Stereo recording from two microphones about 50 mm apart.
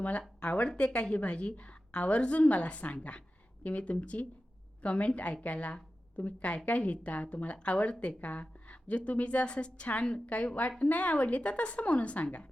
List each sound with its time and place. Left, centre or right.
0.0 s speech: left